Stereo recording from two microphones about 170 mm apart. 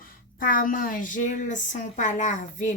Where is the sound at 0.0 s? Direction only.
55° left (ahead or behind).